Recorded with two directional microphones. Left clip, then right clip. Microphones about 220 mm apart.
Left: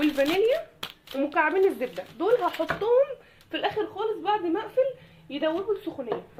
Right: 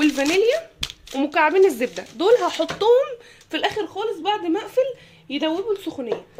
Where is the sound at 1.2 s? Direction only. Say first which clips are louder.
Right 6 dB; 50° right (ahead or behind).